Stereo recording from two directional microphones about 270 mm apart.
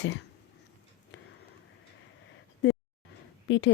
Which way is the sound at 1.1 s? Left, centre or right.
Left.